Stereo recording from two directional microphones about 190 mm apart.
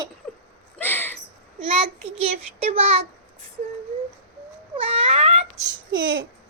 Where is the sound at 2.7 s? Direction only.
30° right (ahead or behind).